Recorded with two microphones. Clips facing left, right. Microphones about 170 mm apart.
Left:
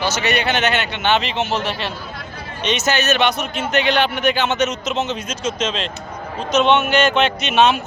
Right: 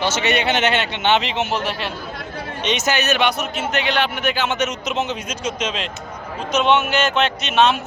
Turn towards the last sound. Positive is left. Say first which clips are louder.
# left 1 dB
turn(degrees=0)  # may be behind; listen again after turning